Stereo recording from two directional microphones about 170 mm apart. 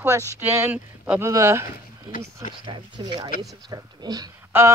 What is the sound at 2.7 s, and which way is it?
A woman's voice, 25° right (ahead or behind).